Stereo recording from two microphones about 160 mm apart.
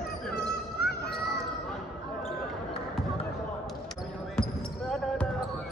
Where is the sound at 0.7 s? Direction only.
85° left.